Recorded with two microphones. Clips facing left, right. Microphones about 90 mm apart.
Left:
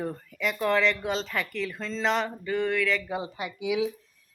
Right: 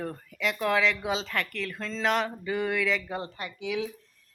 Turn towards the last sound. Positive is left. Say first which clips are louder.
# left 4 dB
turn(degrees=10)  # may be behind; listen again after turning